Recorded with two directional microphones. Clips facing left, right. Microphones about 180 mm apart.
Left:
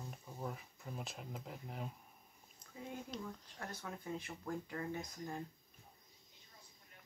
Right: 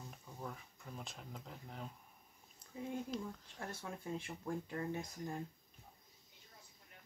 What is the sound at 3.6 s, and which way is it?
Speech, 25° right (ahead or behind).